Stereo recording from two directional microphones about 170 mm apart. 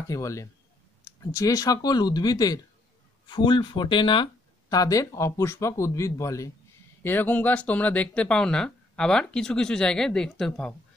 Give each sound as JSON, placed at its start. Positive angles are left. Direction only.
{"t": 0.1, "sound": "speech", "side_deg": 20}